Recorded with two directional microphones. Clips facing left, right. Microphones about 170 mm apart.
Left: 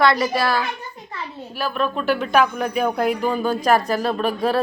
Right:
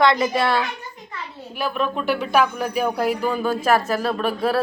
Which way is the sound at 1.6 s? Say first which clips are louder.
Even; 15° right (ahead or behind).